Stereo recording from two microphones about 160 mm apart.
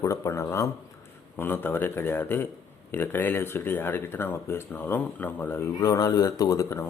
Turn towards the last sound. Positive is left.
turn(degrees=20)  # may be behind; listen again after turning